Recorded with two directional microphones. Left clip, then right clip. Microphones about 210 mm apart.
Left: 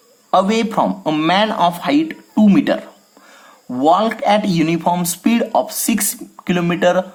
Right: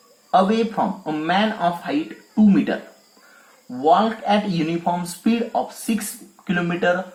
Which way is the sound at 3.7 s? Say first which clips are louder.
Left 3 dB; 35° left (ahead or behind).